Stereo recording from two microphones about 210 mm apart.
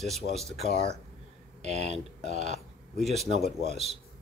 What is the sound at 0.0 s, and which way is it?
Speech, centre (ahead or behind).